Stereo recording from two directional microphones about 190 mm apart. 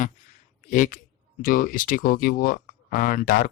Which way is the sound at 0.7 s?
45° left (ahead or behind).